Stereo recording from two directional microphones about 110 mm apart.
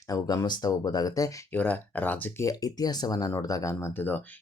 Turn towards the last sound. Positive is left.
turn(degrees=20)  # may be behind; listen again after turning